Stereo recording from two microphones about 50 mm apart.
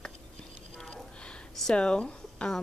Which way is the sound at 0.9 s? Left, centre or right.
Centre.